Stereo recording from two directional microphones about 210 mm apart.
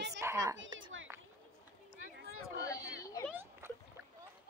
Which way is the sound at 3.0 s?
15° left (ahead or behind).